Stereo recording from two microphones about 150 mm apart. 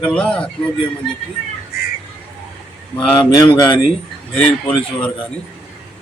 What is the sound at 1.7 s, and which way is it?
Crow, 90° left.